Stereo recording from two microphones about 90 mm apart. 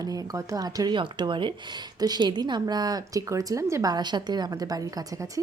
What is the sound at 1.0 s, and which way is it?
Speech, 60° right (ahead or behind).